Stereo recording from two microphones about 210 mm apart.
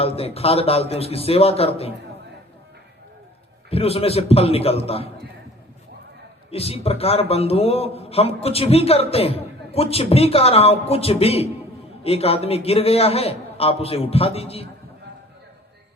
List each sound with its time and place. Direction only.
0.0 s a man's voice: 30° left (ahead or behind)
3.7 s a man's voice: 30° left (ahead or behind)
6.5 s a man's voice: 30° left (ahead or behind)